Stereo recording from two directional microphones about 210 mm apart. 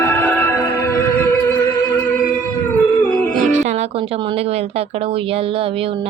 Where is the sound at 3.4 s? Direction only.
35° right (ahead or behind).